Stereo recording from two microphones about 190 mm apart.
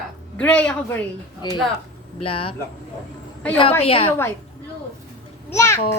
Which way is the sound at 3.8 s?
30° left (ahead or behind).